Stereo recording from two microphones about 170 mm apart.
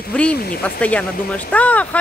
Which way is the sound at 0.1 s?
5° left (ahead or behind).